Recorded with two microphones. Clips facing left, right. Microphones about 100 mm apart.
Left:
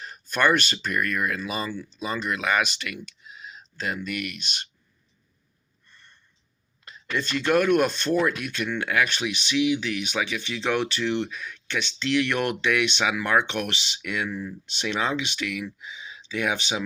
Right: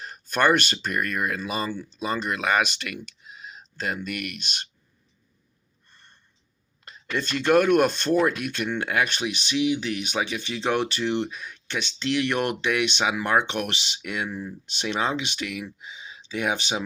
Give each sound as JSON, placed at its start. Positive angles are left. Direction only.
{"t": 0.0, "sound": "a sound", "side_deg": -45}
{"t": 0.9, "sound": "speech", "side_deg": -35}
{"t": 4.0, "sound": "speech", "side_deg": -45}
{"t": 5.9, "sound": "a sound", "side_deg": -40}
{"t": 7.2, "sound": "speech", "side_deg": -40}
{"t": 11.3, "sound": "a sound", "side_deg": -30}
{"t": 11.8, "sound": "speech", "side_deg": -40}
{"t": 13.5, "sound": "speech", "side_deg": -45}
{"t": 14.0, "sound": "speech", "side_deg": -35}